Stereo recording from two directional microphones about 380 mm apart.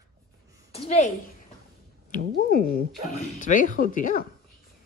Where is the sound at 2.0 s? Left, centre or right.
Left.